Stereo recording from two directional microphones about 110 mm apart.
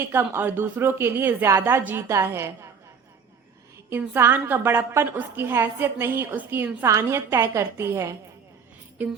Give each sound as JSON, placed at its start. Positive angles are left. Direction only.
{"t": 0.1, "sound": "a woman's voice", "side_deg": -20}
{"t": 3.8, "sound": "a woman's voice", "side_deg": -20}
{"t": 9.0, "sound": "music", "side_deg": -15}